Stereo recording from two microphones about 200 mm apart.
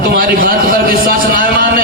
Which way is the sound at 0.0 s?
50° right (ahead or behind).